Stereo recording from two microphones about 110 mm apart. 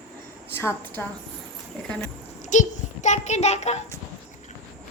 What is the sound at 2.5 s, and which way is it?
A child's voice, 90° left.